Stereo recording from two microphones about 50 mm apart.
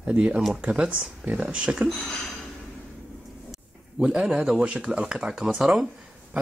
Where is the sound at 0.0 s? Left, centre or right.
Right.